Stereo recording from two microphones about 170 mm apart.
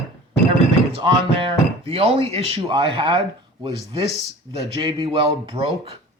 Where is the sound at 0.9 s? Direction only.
30° right (ahead or behind).